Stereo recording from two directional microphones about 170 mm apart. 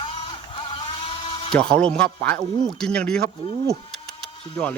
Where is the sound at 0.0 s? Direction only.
30° left (ahead or behind).